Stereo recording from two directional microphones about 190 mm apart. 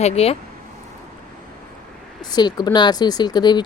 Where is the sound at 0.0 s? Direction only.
35° left (ahead or behind).